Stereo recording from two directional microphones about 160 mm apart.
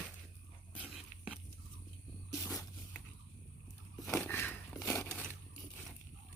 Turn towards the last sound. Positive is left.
turn(degrees=10)  # may be behind; listen again after turning